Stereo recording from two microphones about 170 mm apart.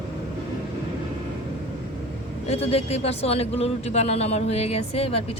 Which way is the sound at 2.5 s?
35° left (ahead or behind).